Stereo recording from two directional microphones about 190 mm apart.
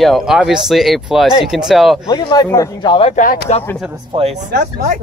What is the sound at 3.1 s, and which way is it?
Speech, 45° left (ahead or behind).